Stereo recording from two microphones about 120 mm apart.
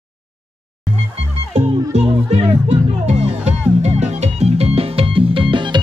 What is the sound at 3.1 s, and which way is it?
Music, 65° right (ahead or behind).